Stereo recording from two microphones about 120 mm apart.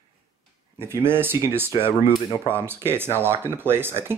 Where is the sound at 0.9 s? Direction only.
20° right (ahead or behind).